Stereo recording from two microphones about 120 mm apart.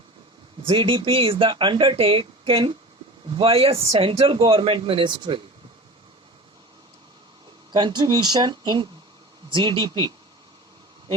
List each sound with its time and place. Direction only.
0.7 s speech: 45° right (ahead or behind)
7.7 s speech: 40° right (ahead or behind)